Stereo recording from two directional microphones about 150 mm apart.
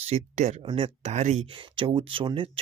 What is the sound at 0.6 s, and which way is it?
Speech, 35° right (ahead or behind).